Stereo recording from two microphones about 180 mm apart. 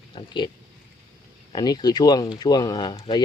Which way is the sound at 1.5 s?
25° left (ahead or behind).